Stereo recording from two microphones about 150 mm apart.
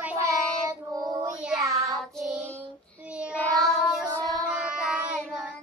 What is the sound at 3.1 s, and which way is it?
Child singing, 5° right (ahead or behind).